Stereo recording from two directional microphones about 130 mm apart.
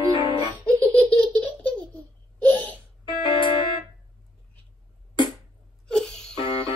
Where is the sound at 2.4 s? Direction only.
10° left (ahead or behind).